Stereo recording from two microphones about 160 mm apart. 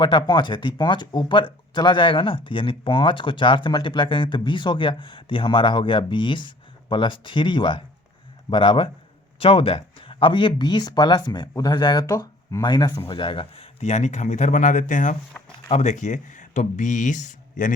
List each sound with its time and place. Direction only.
0.0 s speech: 30° left (ahead or behind); by 17.7 s 50° left (ahead or behind)